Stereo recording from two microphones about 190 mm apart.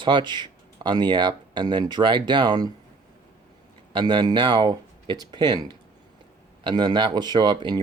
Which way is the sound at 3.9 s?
25° right (ahead or behind).